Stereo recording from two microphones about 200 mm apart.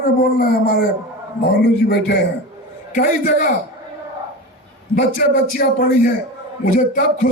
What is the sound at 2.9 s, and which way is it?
Speech, 45° left (ahead or behind).